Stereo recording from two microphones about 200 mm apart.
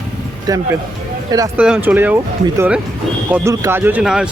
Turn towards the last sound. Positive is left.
turn(degrees=-5)  # may be behind; listen again after turning